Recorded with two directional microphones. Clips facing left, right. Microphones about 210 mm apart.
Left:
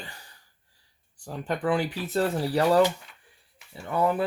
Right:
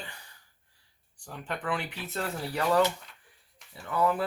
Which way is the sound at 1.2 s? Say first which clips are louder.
Left 7 dB; 35° left (ahead or behind).